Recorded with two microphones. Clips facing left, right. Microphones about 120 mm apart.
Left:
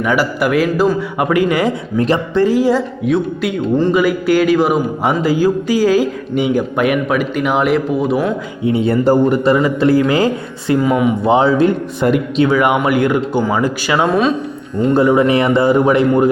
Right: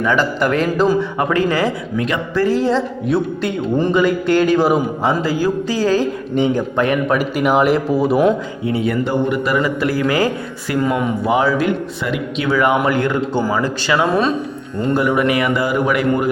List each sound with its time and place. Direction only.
0.0 s speech: 10° left (ahead or behind)
2.0 s speech: 35° left (ahead or behind)
2.3 s speech: 20° left (ahead or behind)
3.1 s speech: centre (ahead or behind)
5.2 s speech: 15° left (ahead or behind)
7.2 s speech: centre (ahead or behind)
8.6 s a man's voice: 25° left (ahead or behind)
10.8 s speech: 5° left (ahead or behind)
11.3 s a man's voice: 25° left (ahead or behind)
14.1 s speech: centre (ahead or behind)
14.9 s a man's voice: 25° left (ahead or behind)